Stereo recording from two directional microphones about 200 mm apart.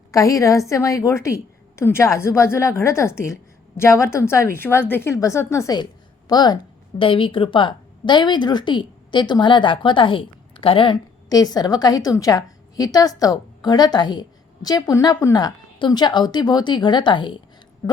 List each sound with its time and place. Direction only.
0.1 s a woman's voice: 15° left (ahead or behind)